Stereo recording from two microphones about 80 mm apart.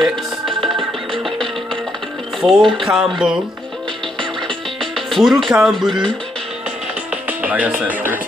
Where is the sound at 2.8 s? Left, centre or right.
Centre.